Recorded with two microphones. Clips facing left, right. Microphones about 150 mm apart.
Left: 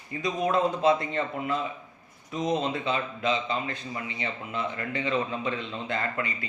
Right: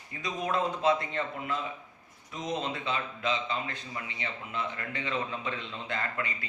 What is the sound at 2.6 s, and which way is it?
A man's voice, 20° left (ahead or behind).